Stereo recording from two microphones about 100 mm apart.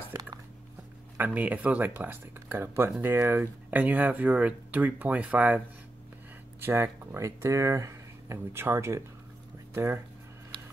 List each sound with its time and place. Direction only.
1.1 s speech: 15° right (ahead or behind)
6.6 s speech: 20° right (ahead or behind)